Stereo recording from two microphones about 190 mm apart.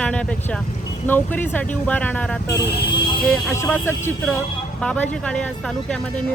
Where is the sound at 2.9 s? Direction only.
25° left (ahead or behind).